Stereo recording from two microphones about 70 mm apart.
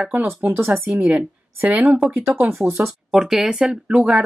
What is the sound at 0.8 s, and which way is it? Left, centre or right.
Speech, right.